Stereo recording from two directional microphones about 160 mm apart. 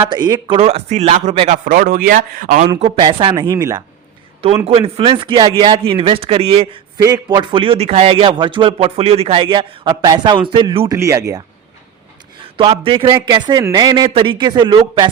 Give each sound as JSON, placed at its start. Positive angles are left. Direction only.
{"t": 0.1, "sound": "speech", "side_deg": -25}
{"t": 2.8, "sound": "speech", "side_deg": -35}
{"t": 4.6, "sound": "a man's voice", "side_deg": -40}
{"t": 7.0, "sound": "a man's voice", "side_deg": -25}
{"t": 10.9, "sound": "speech", "side_deg": -20}
{"t": 12.5, "sound": "a man's voice", "side_deg": -35}
{"t": 13.1, "sound": "speech", "side_deg": -20}